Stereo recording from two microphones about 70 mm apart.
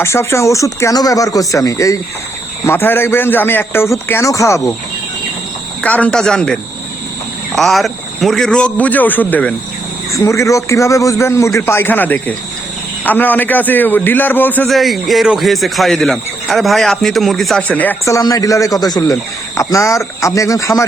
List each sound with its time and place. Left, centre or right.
0.0 s a man's voice: left
2.6 s a man's voice: left
5.8 s a man's voice: left
6.1 s a man's voice: centre; by 9.5 s left
10.1 s a man's voice: left
14.7 s a man's voice: centre
17.6 s a man's voice: left
18.0 s speech: left
19.5 s a man's voice: left